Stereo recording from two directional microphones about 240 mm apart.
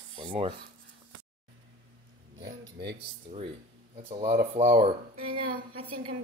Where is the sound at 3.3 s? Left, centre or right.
Right.